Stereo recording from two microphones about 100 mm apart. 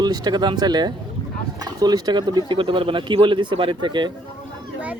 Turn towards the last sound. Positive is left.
turn(degrees=-50)  # may be behind; listen again after turning